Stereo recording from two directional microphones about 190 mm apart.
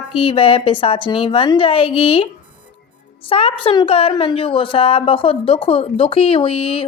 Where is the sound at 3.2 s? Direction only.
30° left (ahead or behind).